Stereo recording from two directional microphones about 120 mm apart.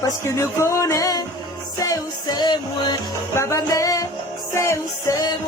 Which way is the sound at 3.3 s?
25° left (ahead or behind).